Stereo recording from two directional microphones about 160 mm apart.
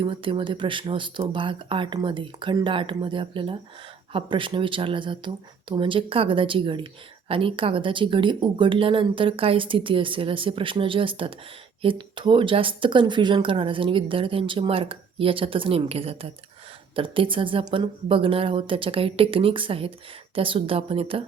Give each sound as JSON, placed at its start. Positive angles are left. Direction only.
{"t": 0.0, "sound": "speech", "side_deg": -30}